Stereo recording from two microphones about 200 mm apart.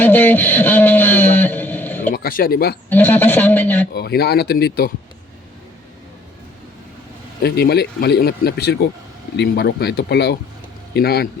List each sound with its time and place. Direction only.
0.0 s a sound: 10° left (ahead or behind)
2.1 s speech: 45° left (ahead or behind)
2.9 s a man's voice: 10° left (ahead or behind)
3.9 s speech: 50° left (ahead or behind)
7.4 s speech: 55° left (ahead or behind)